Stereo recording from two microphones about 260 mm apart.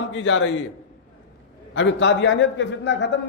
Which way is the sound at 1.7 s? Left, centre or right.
Left.